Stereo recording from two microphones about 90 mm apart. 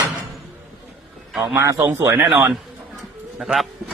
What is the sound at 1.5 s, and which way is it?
Speech, 30° right (ahead or behind).